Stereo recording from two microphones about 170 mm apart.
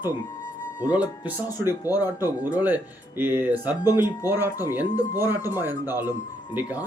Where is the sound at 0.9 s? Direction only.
10° right (ahead or behind).